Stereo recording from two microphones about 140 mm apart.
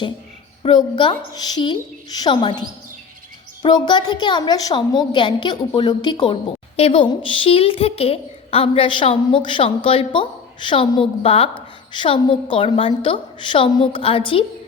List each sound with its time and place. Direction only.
0.6 s a woman's voice: 35° left (ahead or behind)
3.6 s a woman's voice: 35° left (ahead or behind)